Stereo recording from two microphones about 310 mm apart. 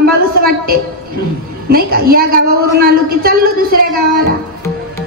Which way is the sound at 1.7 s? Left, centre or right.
Right.